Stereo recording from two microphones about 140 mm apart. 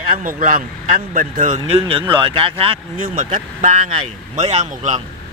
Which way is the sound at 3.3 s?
60° right (ahead or behind).